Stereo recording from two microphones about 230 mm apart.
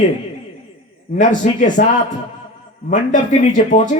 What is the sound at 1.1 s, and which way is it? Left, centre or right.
Speech, left.